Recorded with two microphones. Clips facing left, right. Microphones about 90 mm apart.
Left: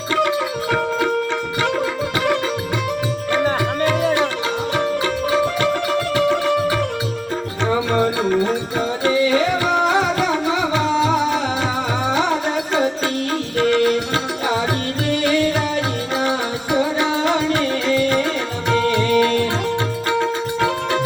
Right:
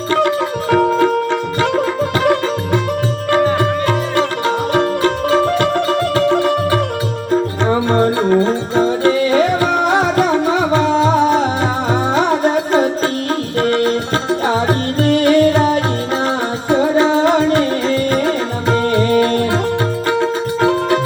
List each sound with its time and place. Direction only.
0.1 s music: 35° right (ahead or behind)
2.2 s music: 40° right (ahead or behind)
9.0 s music: 45° right (ahead or behind)
14.4 s music: 35° right (ahead or behind)
15.0 s music: 45° right (ahead or behind); by 21.0 s 30° right (ahead or behind)